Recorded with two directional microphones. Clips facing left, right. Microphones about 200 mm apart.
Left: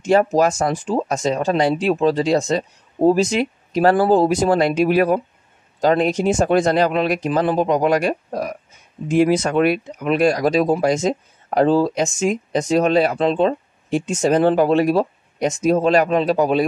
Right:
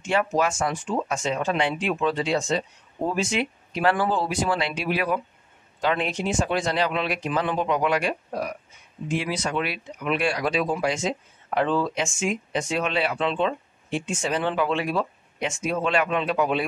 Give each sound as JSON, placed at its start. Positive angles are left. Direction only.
{"t": 0.0, "sound": "speech", "side_deg": 40}